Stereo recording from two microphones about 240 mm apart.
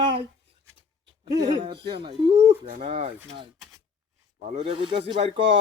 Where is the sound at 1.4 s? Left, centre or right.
Centre.